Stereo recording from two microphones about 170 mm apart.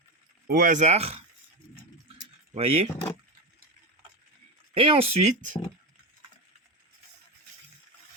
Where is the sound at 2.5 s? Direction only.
35° right (ahead or behind).